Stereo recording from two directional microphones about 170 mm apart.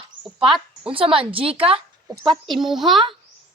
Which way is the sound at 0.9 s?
30° right (ahead or behind).